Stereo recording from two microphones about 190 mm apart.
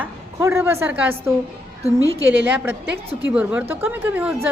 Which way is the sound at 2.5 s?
10° right (ahead or behind).